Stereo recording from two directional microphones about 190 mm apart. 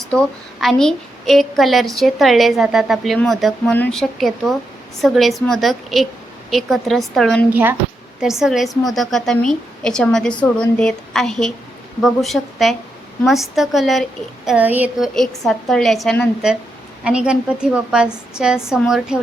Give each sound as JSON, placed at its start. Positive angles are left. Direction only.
{"t": 0.1, "sound": "a woman's voice", "side_deg": 5}
{"t": 7.5, "sound": "a woman's voice", "side_deg": -10}